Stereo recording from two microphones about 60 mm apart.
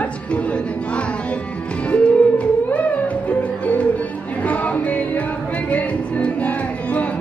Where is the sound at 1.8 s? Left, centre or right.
Centre.